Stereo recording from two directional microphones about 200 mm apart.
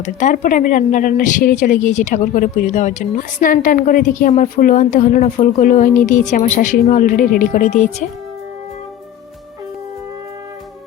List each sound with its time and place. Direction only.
0.0 s a woman's voice: 40° left (ahead or behind)